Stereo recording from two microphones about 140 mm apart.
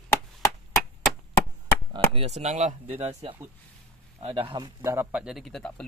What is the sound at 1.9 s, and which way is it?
Speech, 45° right (ahead or behind).